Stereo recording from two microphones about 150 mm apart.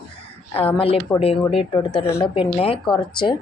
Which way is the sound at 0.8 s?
40° left (ahead or behind).